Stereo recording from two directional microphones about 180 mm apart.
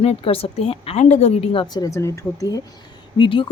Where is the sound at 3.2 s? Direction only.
30° left (ahead or behind).